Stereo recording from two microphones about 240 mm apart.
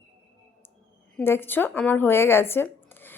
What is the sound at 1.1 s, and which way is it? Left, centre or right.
Speech, centre.